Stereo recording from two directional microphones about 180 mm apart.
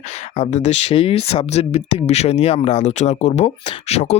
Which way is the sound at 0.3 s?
40° left (ahead or behind).